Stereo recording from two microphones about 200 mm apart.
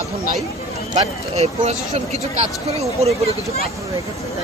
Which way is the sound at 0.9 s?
30° right (ahead or behind).